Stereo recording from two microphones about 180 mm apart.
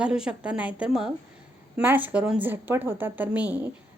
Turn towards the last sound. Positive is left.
turn(degrees=-5)  # may be behind; listen again after turning